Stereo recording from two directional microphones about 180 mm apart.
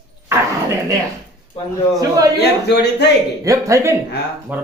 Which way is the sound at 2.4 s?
70° left (ahead or behind).